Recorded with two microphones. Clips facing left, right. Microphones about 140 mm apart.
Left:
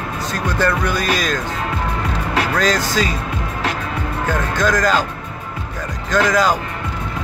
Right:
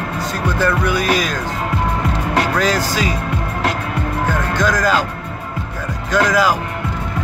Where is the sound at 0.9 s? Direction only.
10° right (ahead or behind).